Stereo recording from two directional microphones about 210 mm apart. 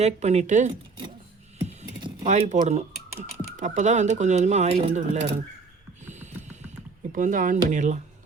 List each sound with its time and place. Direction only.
0.0 s speech: 30° right (ahead or behind)
1.6 s computer keyboard: 30° right (ahead or behind)
3.6 s speech: 35° right (ahead or behind)
6.1 s music: 35° right (ahead or behind)
7.1 s speech: 40° right (ahead or behind)